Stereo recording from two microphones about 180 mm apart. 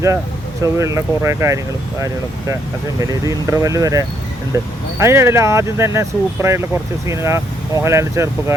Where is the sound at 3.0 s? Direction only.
20° right (ahead or behind).